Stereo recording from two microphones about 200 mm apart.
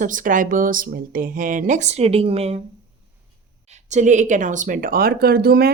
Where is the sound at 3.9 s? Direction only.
35° right (ahead or behind).